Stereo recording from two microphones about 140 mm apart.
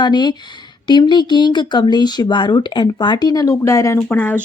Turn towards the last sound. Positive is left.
turn(degrees=15)  # may be behind; listen again after turning